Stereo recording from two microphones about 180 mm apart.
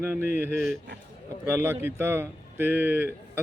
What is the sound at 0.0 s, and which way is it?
Speech, 10° right (ahead or behind).